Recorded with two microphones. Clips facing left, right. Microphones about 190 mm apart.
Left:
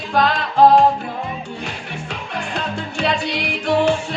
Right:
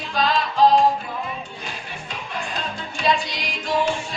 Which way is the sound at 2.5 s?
65° left (ahead or behind).